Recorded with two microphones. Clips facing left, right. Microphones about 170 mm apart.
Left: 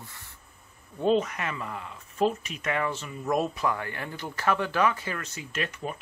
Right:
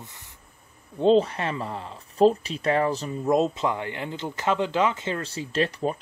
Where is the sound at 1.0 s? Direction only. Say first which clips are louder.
Right 5 dB; 30° right (ahead or behind).